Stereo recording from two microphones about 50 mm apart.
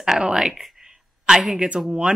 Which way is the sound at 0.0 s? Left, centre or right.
Centre.